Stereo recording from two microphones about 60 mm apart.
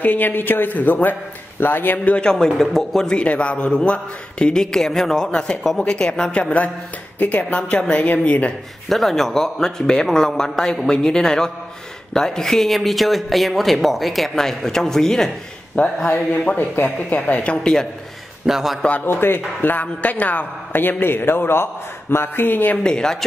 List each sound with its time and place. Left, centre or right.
0.0 s a man's voice: left
2.3 s speech: centre
3.2 s a man's voice: left
7.2 s a woman's voice: left
8.8 s a man's voice: centre
15.7 s a woman's voice: left
18.5 s a man's voice: centre
19.0 s a man's voice: left
22.8 s a man's voice: centre